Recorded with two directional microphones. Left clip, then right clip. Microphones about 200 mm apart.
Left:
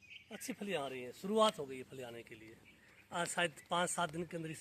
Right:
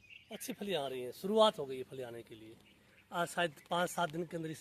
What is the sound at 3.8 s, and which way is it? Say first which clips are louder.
Speech: right 2 dB; 40° right (ahead or behind).